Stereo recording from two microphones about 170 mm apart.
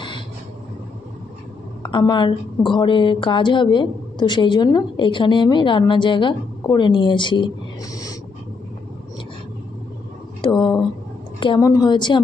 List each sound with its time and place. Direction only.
1.8 s a woman's voice: 25° left (ahead or behind)
10.4 s a woman's voice: 25° left (ahead or behind)